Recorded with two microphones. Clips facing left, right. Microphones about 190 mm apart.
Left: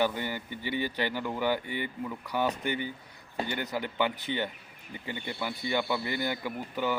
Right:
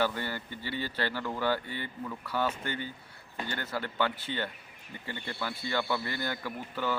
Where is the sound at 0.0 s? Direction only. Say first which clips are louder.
Left 2 dB; 15° left (ahead or behind).